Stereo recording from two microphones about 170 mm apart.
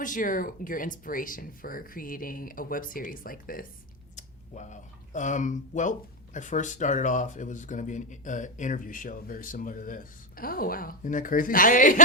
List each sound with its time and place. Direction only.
0.0 s speech: 50° left (ahead or behind)
4.1 s speech: 45° left (ahead or behind)